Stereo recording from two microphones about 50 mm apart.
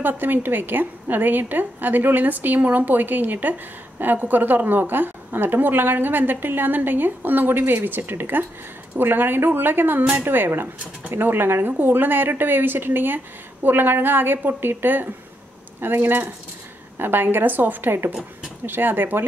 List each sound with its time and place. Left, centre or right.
0.2 s a woman's voice: right